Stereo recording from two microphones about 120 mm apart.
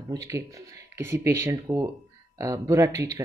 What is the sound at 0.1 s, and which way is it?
Speech, 25° right (ahead or behind).